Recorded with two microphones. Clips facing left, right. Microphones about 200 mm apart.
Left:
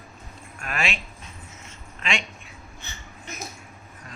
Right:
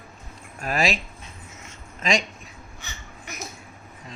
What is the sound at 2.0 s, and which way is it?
Speech, 40° right (ahead or behind).